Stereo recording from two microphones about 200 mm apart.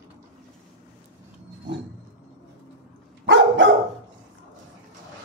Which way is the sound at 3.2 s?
65° right (ahead or behind).